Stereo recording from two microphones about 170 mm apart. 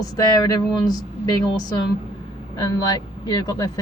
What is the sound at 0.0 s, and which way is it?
Speech, 20° left (ahead or behind).